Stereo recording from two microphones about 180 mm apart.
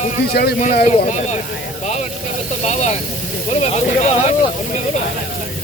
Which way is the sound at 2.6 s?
40° left (ahead or behind).